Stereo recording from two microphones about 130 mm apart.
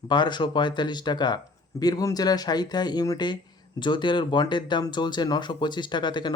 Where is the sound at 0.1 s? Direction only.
35° left (ahead or behind).